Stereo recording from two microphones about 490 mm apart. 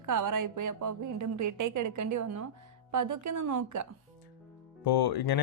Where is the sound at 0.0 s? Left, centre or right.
Right.